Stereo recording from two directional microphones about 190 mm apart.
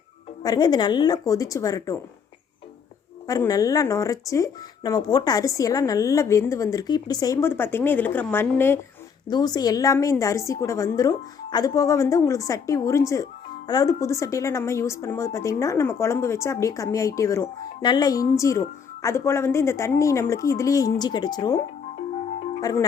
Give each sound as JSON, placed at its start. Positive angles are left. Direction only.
{"t": 0.4, "sound": "a woman's voice", "side_deg": 20}
{"t": 3.2, "sound": "speech", "side_deg": 20}
{"t": 22.6, "sound": "a woman's voice", "side_deg": 20}